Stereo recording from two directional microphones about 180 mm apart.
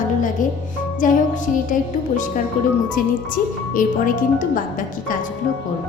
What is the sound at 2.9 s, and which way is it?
Speech, 45° left (ahead or behind).